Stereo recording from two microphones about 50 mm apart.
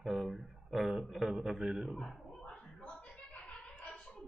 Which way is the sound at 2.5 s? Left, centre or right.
Centre.